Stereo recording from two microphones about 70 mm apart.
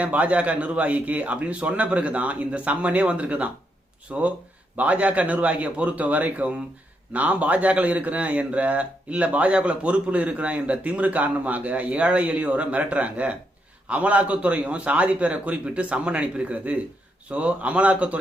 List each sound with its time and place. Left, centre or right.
0.0 s a man's voice: right